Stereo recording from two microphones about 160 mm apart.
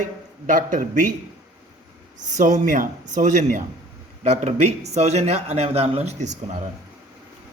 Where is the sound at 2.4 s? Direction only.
55° right (ahead or behind).